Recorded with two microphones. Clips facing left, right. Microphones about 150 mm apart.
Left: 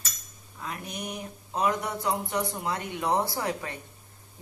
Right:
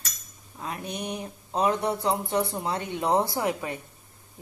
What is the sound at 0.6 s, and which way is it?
Speech, 30° right (ahead or behind).